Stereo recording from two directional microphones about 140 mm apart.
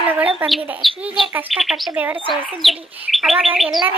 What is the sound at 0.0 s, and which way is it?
Bird, 10° right (ahead or behind).